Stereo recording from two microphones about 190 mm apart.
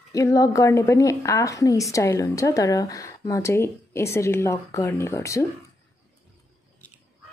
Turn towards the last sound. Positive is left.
turn(degrees=15)  # may be behind; listen again after turning